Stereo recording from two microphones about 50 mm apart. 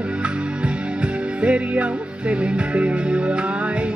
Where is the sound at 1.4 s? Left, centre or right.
Right.